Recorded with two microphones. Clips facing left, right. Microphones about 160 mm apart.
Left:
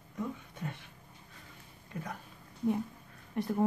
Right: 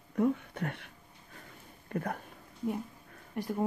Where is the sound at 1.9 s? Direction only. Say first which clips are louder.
Right 7 dB; 60° right (ahead or behind).